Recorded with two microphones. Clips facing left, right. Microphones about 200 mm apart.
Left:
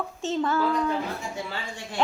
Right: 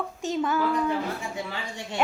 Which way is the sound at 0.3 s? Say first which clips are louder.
Left 1 dB; 15° right (ahead or behind).